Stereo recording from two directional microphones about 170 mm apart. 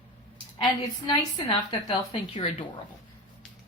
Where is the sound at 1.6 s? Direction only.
30° left (ahead or behind).